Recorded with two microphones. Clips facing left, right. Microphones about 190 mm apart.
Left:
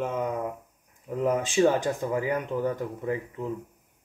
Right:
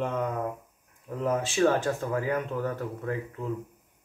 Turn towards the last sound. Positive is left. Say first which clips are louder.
# left 2 dB
turn(degrees=15)  # may be behind; listen again after turning